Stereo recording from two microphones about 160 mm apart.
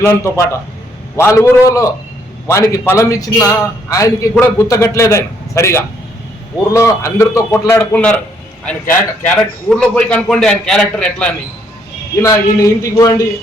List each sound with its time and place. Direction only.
0.0 s a man's voice: 15° left (ahead or behind)
12.2 s a man's voice: 20° left (ahead or behind)